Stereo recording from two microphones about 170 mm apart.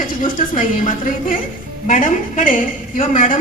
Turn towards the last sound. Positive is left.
turn(degrees=50)  # may be behind; listen again after turning